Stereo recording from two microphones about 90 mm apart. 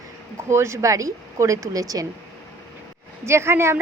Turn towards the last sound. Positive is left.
turn(degrees=-30)  # may be behind; listen again after turning